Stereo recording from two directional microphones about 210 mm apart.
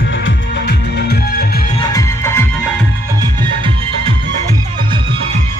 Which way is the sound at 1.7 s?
15° left (ahead or behind).